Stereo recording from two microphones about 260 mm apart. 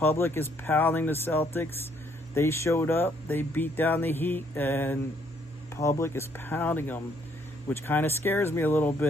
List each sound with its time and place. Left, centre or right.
0.0 s speech: centre